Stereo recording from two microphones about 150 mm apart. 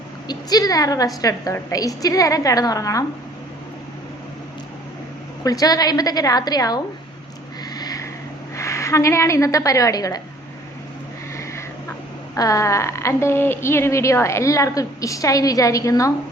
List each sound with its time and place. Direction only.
0.3 s speech: 25° left (ahead or behind)
5.4 s speech: 25° left (ahead or behind)
7.6 s a sound: 25° left (ahead or behind)
8.5 s a woman's voice: 20° left (ahead or behind)
11.3 s a sound: 20° left (ahead or behind)
12.4 s speech: 20° left (ahead or behind)